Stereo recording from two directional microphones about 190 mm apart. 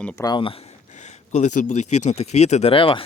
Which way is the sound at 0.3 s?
25° left (ahead or behind).